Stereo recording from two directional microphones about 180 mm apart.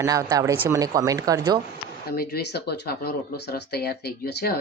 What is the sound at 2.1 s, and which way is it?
Speech, 60° left (ahead or behind).